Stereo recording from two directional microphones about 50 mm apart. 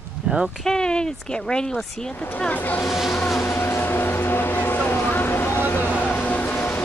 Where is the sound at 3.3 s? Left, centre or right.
Left.